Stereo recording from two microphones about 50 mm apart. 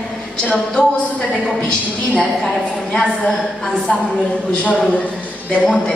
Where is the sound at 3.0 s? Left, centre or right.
Centre.